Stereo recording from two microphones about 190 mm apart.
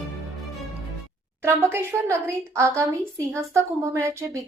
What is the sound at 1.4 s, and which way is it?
A woman's voice, 15° right (ahead or behind).